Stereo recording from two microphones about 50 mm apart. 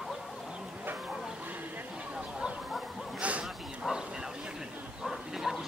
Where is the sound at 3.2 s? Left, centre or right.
Right.